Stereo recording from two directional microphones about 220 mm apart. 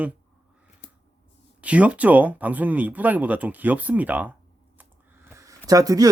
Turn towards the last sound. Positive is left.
turn(degrees=-15)  # may be behind; listen again after turning